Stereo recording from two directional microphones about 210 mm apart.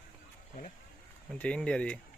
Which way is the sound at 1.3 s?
5° left (ahead or behind).